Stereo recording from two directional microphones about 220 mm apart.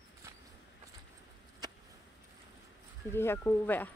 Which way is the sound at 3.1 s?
10° left (ahead or behind).